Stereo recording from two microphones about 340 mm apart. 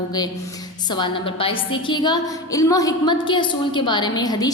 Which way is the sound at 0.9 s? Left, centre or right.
Centre.